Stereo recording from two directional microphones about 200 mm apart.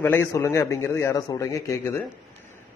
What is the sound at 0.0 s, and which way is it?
A man's voice, 10° left (ahead or behind).